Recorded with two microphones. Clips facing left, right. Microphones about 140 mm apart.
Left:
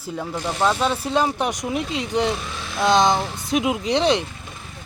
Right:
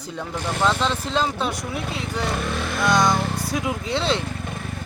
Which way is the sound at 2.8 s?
25° left (ahead or behind).